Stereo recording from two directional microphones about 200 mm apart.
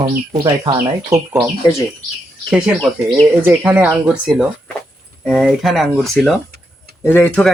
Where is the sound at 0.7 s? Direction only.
10° right (ahead or behind).